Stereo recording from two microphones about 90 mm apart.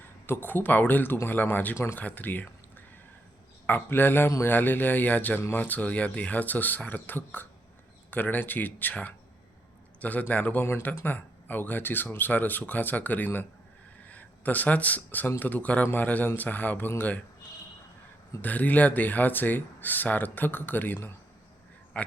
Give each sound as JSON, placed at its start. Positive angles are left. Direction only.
{"t": 0.3, "sound": "a man's voice", "side_deg": 20}
{"t": 18.4, "sound": "a man's voice", "side_deg": 15}